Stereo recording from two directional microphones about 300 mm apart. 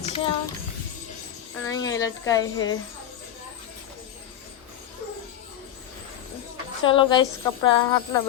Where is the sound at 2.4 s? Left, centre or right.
Left.